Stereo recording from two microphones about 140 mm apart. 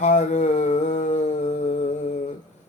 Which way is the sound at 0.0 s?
55° left (ahead or behind).